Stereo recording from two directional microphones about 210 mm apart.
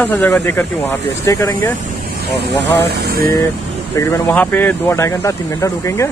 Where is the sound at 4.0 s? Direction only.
10° left (ahead or behind).